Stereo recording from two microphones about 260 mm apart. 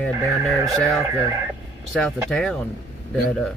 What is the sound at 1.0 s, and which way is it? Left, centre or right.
Speech, centre.